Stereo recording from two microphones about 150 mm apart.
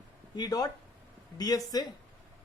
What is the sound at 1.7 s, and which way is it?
Speech, 25° left (ahead or behind).